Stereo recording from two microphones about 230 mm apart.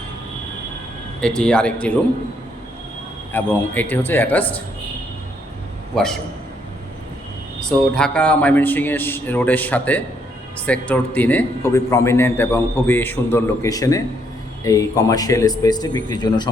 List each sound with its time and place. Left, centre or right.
1.2 s a man's voice: centre
3.3 s a man's voice: centre
5.9 s a man's voice: centre
7.9 s a man's voice: centre